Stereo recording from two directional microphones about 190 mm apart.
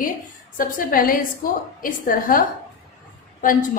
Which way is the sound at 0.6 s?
50° left (ahead or behind).